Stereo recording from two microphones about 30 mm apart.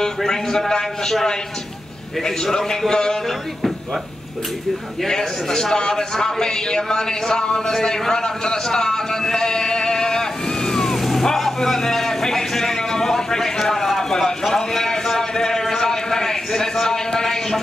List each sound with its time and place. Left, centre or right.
0.3 s a man's voice: centre
2.2 s a man's voice: centre
5.0 s a man's voice: centre
8.6 s vehicle: left
11.0 s vehicle: centre
11.3 s a sound: centre